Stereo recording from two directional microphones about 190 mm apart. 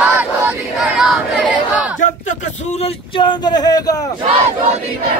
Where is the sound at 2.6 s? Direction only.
35° left (ahead or behind).